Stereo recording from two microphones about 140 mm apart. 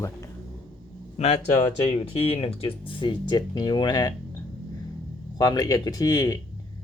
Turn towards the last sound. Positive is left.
turn(degrees=25)  # may be behind; listen again after turning